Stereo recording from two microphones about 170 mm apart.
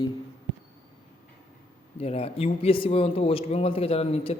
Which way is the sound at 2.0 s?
35° left (ahead or behind).